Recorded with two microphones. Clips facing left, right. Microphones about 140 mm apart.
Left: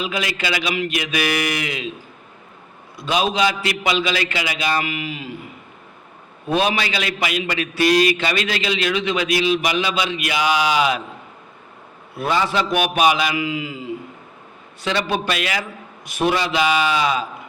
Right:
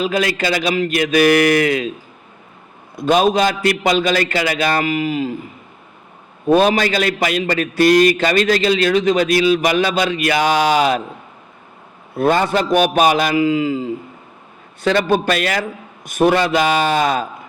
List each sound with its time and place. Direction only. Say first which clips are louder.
0.0 s a man's voice: right 6 dB; 45° right (ahead or behind)
2.9 s a man's voice: right 7 dB; 50° right (ahead or behind)
6.5 s a man's voice: right 7 dB; 45° right (ahead or behind)
12.1 s a man's voice: right 5 dB; 50° right (ahead or behind)